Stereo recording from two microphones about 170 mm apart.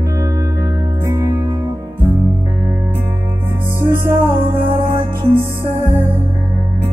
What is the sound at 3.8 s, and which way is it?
Music, 15° right (ahead or behind).